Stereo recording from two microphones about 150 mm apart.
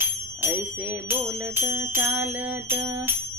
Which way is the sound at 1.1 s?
15° right (ahead or behind).